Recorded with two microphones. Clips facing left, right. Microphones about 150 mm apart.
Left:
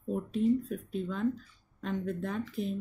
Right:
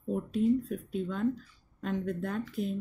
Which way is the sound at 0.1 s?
5° right (ahead or behind).